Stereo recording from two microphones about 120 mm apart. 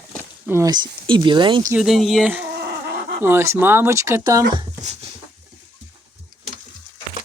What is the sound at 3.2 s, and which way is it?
Speech, 20° right (ahead or behind).